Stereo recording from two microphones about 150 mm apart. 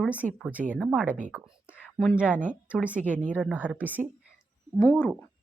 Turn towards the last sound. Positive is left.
turn(degrees=5)  # may be behind; listen again after turning